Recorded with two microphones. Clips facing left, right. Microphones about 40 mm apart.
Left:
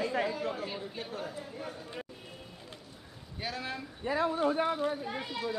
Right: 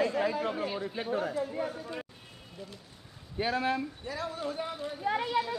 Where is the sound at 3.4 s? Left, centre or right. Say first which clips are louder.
Right 8 dB; right.